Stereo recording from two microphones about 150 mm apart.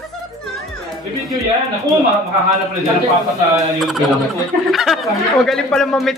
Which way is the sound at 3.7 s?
Centre (ahead or behind).